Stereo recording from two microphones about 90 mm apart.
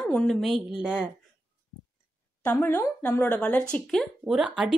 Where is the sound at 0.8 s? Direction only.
10° right (ahead or behind).